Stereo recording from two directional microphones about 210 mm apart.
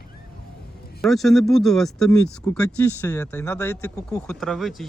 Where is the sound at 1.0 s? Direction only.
Centre (ahead or behind).